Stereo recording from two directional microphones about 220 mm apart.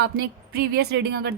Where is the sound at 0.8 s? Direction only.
50° right (ahead or behind).